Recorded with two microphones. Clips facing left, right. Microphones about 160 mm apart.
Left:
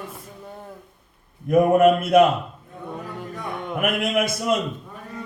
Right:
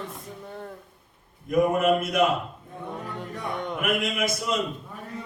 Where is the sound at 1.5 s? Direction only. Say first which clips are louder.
Left 6 dB; 55° left (ahead or behind).